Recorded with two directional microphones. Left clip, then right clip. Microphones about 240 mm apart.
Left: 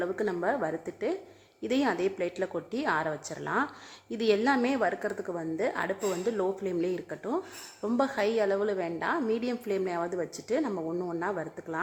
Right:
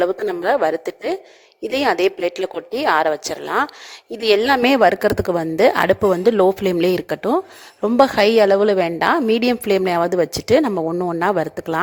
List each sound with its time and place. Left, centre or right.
0.0 s speech: right